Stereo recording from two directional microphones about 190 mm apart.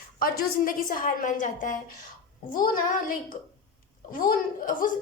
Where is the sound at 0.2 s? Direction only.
50° left (ahead or behind).